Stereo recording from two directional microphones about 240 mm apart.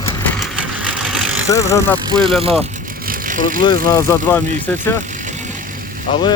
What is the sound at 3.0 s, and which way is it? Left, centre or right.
Vehicle, right.